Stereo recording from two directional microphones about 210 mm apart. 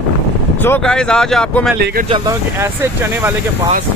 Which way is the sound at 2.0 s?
25° right (ahead or behind).